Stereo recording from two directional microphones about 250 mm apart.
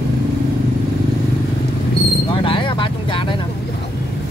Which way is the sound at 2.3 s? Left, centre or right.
Centre.